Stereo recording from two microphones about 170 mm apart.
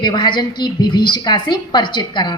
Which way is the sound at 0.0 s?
25° left (ahead or behind).